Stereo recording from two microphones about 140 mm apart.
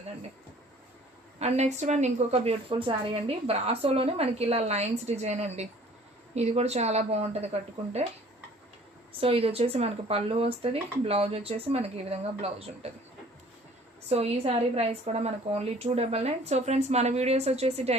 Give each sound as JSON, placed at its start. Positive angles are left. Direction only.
{"t": 1.4, "sound": "a woman's voice", "side_deg": -50}
{"t": 9.1, "sound": "a woman's voice", "side_deg": -45}
{"t": 14.1, "sound": "a woman's voice", "side_deg": -45}